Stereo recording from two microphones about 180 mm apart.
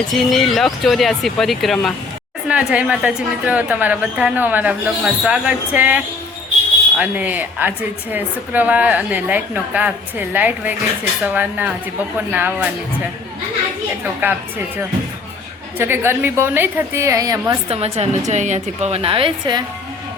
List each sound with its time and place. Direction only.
0.1 s speech: centre (ahead or behind)
14.0 s speech: 10° right (ahead or behind)
15.8 s speech: 15° right (ahead or behind)
17.7 s a woman's voice: 35° right (ahead or behind)